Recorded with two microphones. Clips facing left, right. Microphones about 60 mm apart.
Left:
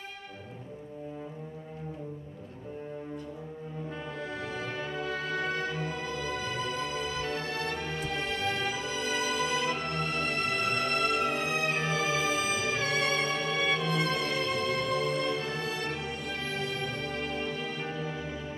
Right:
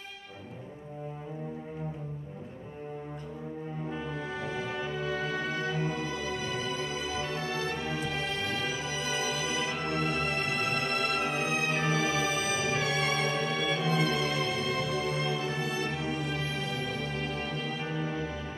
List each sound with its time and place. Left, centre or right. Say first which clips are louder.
4.2 s music: right 1 dB; centre
7.1 s music: even; centre
8.9 s music: left 3 dB; centre
11.2 s music: even; centre
11.8 s music: right 1 dB; right
12.8 s music: even; centre
17.4 s music: even; centre